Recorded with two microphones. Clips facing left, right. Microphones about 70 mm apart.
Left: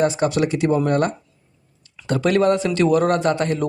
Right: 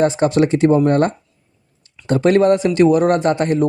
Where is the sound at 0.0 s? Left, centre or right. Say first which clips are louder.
Right 4 dB; right.